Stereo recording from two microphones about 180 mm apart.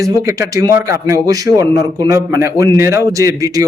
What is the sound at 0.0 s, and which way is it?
Speech, 15° right (ahead or behind).